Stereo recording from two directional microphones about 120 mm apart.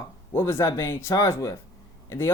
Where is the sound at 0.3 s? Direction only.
25° left (ahead or behind).